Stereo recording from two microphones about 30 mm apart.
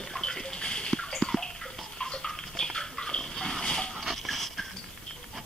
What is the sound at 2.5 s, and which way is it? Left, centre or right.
Bathtub, left.